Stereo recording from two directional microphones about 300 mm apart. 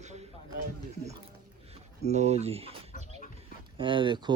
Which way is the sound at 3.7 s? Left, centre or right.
Centre.